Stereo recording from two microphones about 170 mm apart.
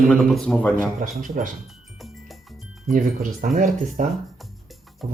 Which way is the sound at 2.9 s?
50° right (ahead or behind).